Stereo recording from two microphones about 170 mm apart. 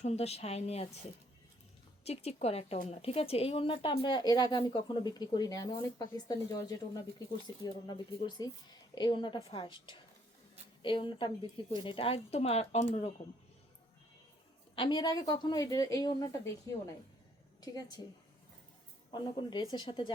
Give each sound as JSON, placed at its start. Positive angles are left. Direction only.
{"t": 0.0, "sound": "a woman's voice", "side_deg": 40}
{"t": 2.0, "sound": "a woman's voice", "side_deg": 40}
{"t": 14.8, "sound": "a woman's voice", "side_deg": 25}
{"t": 19.1, "sound": "speech", "side_deg": 30}